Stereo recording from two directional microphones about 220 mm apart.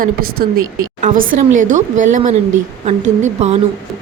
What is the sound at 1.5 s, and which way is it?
Speech, 35° right (ahead or behind).